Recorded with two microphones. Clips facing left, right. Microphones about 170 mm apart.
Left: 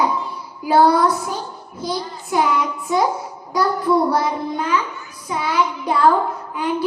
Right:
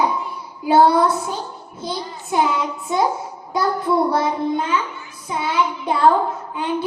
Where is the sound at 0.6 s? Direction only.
25° right (ahead or behind).